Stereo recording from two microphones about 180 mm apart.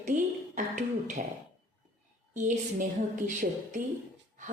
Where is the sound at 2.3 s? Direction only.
45° right (ahead or behind).